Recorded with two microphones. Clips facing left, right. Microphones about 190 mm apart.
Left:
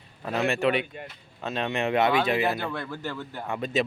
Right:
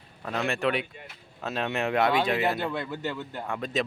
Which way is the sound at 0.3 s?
5° left (ahead or behind).